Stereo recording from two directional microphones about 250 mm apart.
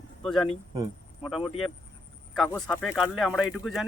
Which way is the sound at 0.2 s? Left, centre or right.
Centre.